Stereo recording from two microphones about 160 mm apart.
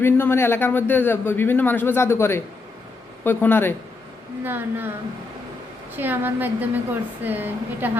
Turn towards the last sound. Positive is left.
turn(degrees=-10)  # may be behind; listen again after turning